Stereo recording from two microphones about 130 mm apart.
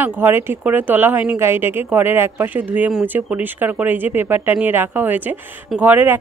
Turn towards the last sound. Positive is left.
turn(degrees=-15)  # may be behind; listen again after turning